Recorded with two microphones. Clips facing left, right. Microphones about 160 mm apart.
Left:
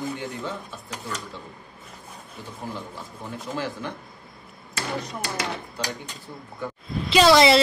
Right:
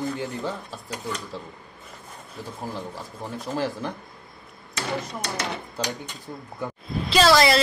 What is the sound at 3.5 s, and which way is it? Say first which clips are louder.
Speech: right 3 dB; 35° right (ahead or behind).